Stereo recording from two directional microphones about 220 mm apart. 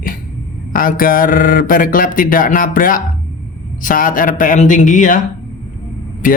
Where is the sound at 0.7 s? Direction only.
40° left (ahead or behind).